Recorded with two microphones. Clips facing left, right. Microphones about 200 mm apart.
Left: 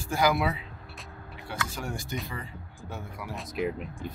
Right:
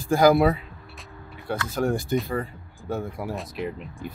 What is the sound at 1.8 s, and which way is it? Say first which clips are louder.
Speech: right 11 dB; 50° right (ahead or behind).